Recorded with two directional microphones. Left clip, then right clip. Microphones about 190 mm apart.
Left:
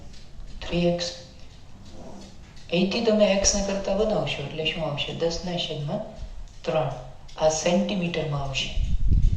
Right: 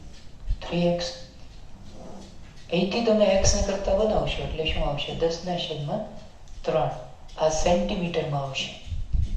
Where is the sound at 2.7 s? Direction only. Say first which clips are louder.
Even; 20° left (ahead or behind).